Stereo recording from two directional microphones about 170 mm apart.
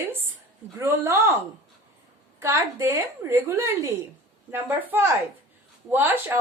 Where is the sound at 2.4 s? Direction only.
15° right (ahead or behind).